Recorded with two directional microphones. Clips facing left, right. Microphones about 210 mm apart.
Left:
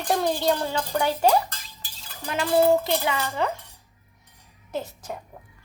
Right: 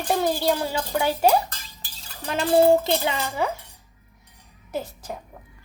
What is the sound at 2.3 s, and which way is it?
A child's voice, 30° right (ahead or behind).